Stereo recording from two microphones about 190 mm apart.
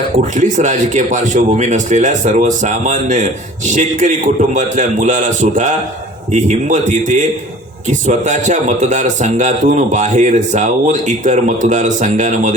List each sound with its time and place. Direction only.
0.3 s a man's voice: 40° right (ahead or behind)